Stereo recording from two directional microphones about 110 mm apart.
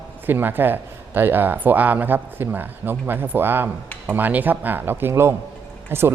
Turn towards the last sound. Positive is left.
turn(degrees=-20)  # may be behind; listen again after turning